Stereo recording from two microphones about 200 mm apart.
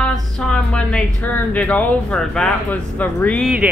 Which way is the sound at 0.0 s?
5° left (ahead or behind).